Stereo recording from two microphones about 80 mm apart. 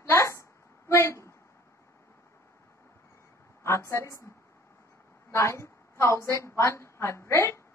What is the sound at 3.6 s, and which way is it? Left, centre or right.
Speech, left.